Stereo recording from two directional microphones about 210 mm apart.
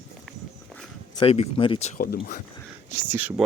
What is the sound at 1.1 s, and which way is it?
Speech, 30° left (ahead or behind).